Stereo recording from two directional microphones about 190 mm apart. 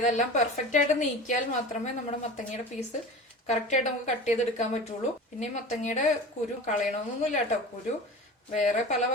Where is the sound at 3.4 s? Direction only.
40° left (ahead or behind).